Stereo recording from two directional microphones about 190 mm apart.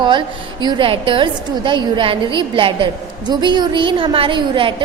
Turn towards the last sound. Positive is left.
turn(degrees=-25)  # may be behind; listen again after turning